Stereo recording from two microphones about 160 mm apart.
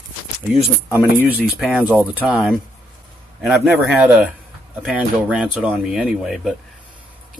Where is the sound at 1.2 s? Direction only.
10° right (ahead or behind).